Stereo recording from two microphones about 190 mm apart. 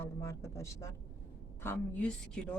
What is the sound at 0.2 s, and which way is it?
A woman's voice, 15° left (ahead or behind).